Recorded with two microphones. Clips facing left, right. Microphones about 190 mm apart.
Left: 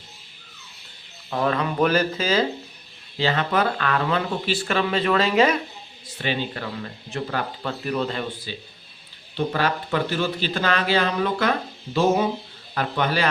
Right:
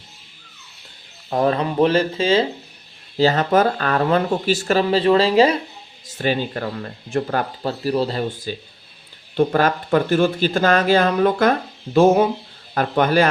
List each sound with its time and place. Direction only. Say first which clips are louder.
1.3 s speech: right 4 dB; 35° right (ahead or behind)
3.2 s speech: right 6 dB; 40° right (ahead or behind)
6.1 s speech: right 5 dB; 45° right (ahead or behind)
9.3 s speech: right 6 dB; 50° right (ahead or behind)
12.7 s speech: right 7 dB; 45° right (ahead or behind)